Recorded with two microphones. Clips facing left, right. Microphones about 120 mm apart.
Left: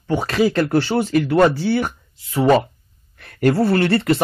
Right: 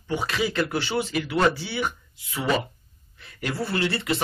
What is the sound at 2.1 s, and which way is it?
Speech, 40° left (ahead or behind).